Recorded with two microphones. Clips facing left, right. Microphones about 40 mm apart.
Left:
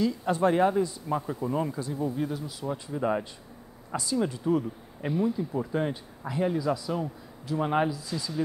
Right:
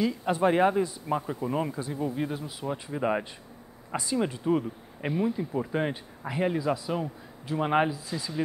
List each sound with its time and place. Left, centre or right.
0.0 s speech: centre